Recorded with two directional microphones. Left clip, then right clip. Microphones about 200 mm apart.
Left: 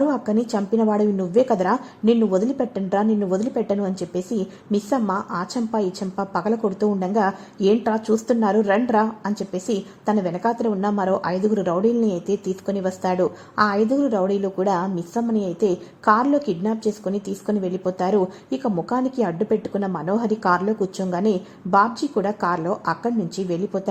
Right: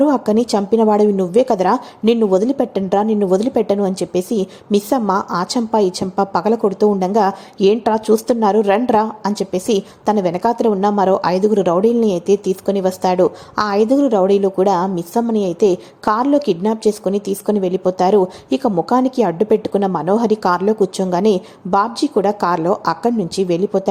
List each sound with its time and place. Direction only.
0.0 s speech: 20° right (ahead or behind)